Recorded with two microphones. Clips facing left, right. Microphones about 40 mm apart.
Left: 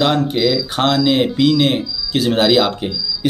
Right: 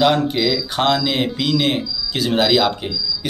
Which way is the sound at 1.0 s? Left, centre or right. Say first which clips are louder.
Left 6 dB; centre.